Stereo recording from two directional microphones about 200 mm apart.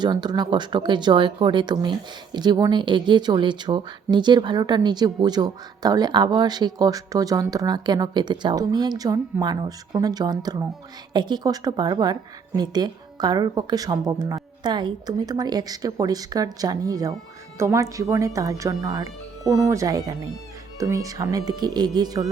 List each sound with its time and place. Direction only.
0.0 s speech: 20° right (ahead or behind)